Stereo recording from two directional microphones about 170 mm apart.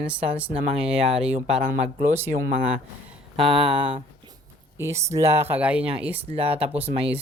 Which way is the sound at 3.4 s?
30° right (ahead or behind).